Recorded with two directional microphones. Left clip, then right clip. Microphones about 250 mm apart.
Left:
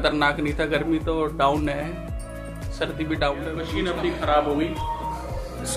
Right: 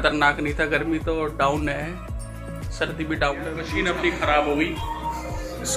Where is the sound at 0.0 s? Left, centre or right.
Centre.